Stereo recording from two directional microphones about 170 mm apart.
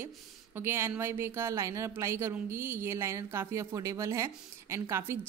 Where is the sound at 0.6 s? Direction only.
15° right (ahead or behind).